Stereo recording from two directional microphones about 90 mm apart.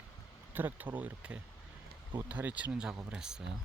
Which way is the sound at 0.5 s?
20° right (ahead or behind).